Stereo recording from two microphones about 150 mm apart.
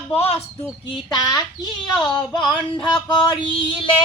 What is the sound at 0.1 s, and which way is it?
Music, 40° left (ahead or behind).